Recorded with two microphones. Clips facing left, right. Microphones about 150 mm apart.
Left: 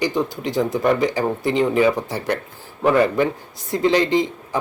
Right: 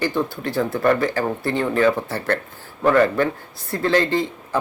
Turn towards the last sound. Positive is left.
turn(degrees=15)  # may be behind; listen again after turning